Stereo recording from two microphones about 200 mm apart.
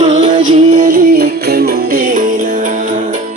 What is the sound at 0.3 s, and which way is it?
Music, 40° right (ahead or behind).